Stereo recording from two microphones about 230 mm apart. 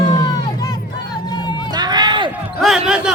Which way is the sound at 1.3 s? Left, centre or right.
Centre.